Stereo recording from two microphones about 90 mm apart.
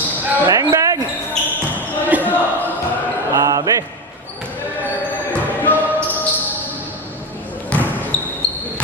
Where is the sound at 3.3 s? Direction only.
40° right (ahead or behind).